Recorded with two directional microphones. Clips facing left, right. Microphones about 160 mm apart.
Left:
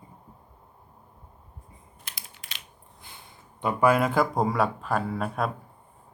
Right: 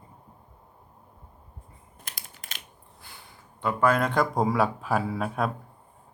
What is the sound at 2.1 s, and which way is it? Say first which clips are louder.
Typing: right 1 dB; 45° right (ahead or behind).